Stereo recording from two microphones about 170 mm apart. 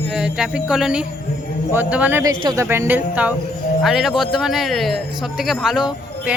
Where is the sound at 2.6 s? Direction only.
10° right (ahead or behind).